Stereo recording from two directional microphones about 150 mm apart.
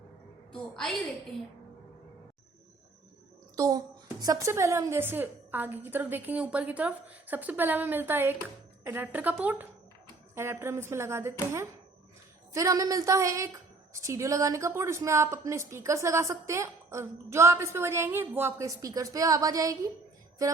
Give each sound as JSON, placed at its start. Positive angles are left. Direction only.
{"t": 0.5, "sound": "a woman's voice", "side_deg": 5}
{"t": 3.5, "sound": "a child's voice", "side_deg": -25}